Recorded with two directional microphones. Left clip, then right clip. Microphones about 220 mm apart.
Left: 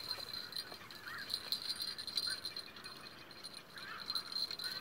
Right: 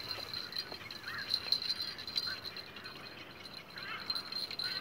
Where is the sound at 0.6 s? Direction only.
10° left (ahead or behind).